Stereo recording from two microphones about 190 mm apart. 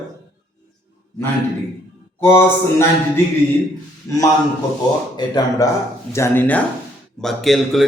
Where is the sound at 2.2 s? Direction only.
15° left (ahead or behind).